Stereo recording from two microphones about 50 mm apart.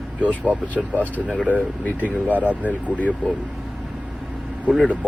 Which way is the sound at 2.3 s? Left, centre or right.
Right.